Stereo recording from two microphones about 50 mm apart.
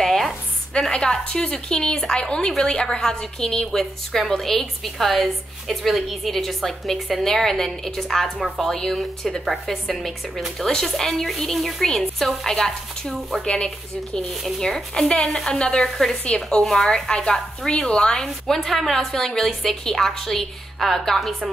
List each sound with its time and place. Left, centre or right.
0.0 s a sound: centre
0.7 s a woman's voice: centre
14.6 s a woman's voice: centre